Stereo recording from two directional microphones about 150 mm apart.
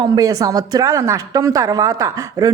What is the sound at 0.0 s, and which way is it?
A woman's voice, 25° right (ahead or behind).